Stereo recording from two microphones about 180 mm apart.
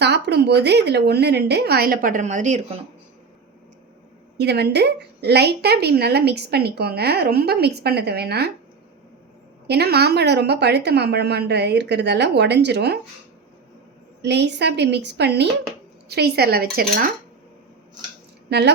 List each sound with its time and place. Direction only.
0.0 s a woman's voice: 70° right (ahead or behind); by 2.8 s 40° right (ahead or behind)
4.4 s a woman's voice: 65° right (ahead or behind)
9.6 s a woman's voice: 65° right (ahead or behind)
14.2 s a woman's voice: 70° right (ahead or behind); by 17.1 s 55° right (ahead or behind)
18.4 s speech: 65° right (ahead or behind)